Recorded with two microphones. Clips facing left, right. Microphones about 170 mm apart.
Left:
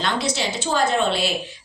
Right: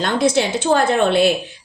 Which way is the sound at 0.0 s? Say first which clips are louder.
Right 7 dB; 55° right (ahead or behind).